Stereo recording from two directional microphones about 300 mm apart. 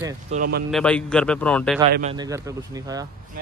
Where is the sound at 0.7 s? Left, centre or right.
Centre.